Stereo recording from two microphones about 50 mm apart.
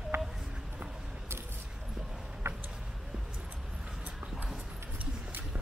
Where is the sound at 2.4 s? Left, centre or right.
Right.